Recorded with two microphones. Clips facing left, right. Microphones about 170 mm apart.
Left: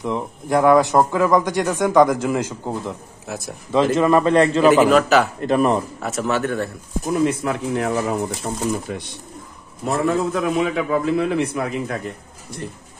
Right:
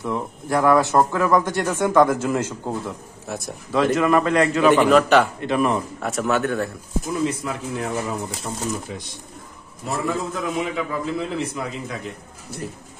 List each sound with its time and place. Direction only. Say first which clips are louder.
0.0 s speech: left 2 dB; 15° left (ahead or behind)
3.3 s speech: even; centre (ahead or behind)
3.9 s a man's voice: left 3 dB; 30° left (ahead or behind)
4.6 s speech: right 1 dB; 5° left (ahead or behind)
5.4 s speech: left 3 dB; 40° left (ahead or behind)
5.9 s speech: even; centre (ahead or behind)
7.1 s a man's voice: left 5 dB; 60° left (ahead or behind)
8.5 s speech: left 4 dB; 45° left (ahead or behind)
10.0 s a man's voice: left 6 dB; 65° left (ahead or behind)